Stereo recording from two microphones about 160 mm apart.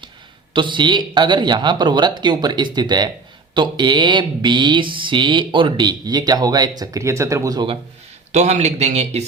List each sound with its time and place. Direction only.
0.5 s speech: 30° right (ahead or behind)
8.3 s speech: 45° right (ahead or behind)